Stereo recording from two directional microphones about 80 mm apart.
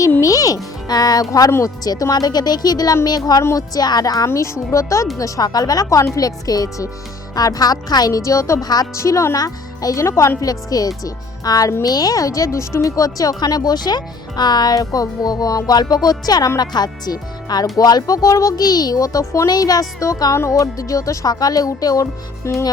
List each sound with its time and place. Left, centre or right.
0.2 s a child's voice: left
4.3 s speech: left
8.6 s speech: left
9.0 s speech: left
19.5 s speech: left
22.4 s speech: left